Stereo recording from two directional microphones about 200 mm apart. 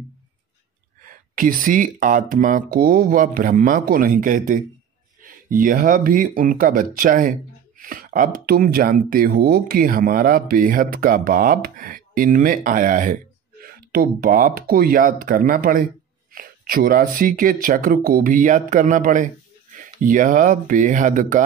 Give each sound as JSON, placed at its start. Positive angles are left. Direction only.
{"t": 1.0, "sound": "speech", "side_deg": -45}